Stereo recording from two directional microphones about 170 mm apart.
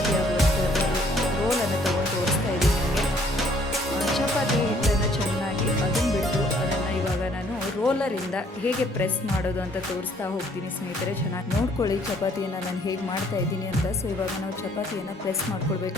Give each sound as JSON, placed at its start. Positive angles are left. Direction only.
{"t": 0.1, "sound": "music", "side_deg": 0}
{"t": 7.9, "sound": "music", "side_deg": 5}